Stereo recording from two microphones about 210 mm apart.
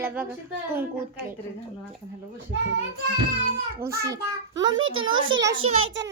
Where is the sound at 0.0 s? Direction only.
10° right (ahead or behind).